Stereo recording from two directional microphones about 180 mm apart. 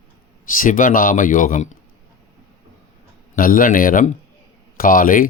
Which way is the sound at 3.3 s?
50° left (ahead or behind).